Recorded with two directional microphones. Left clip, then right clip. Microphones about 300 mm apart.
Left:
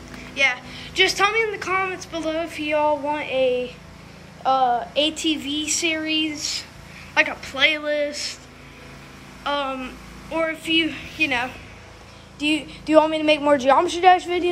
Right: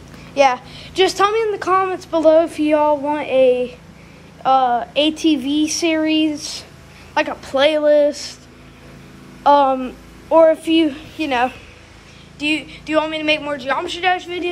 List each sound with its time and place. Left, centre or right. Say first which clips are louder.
0.3 s a woman's voice: right 6 dB; centre
9.4 s speech: right 12 dB; centre
12.4 s a woman's voice: right 3 dB; centre